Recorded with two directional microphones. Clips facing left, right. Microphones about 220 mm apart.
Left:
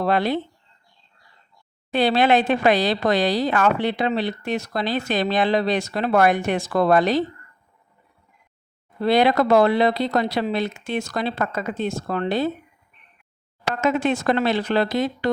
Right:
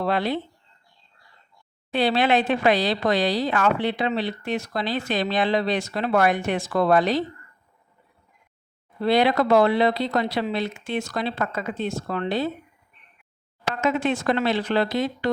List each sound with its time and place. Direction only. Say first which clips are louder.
0.0 s speech: left 3 dB; 45° left (ahead or behind)
1.9 s speech: left 3 dB; 45° left (ahead or behind)
9.0 s speech: left 2 dB; 45° left (ahead or behind)
13.8 s speech: left 2 dB; 45° left (ahead or behind)